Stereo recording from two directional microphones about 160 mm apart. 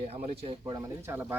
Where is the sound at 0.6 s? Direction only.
20° right (ahead or behind).